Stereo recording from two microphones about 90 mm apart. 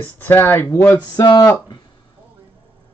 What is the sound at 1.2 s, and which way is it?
Speech, 55° left (ahead or behind).